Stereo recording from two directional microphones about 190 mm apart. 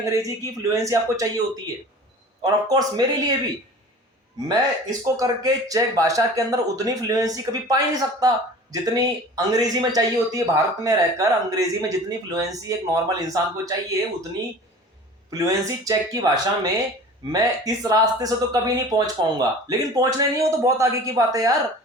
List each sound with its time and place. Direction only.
0.0 s a man's voice: 15° right (ahead or behind)
2.4 s speech: 20° right (ahead or behind)
4.4 s a man's voice: 20° right (ahead or behind)
15.3 s speech: 20° right (ahead or behind)